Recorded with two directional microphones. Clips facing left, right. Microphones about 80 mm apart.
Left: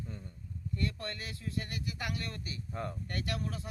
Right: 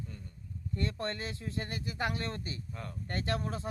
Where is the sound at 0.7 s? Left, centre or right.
Right.